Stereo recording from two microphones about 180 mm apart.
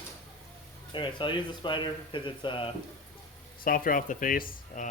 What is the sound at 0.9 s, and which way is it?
Speech, 25° left (ahead or behind).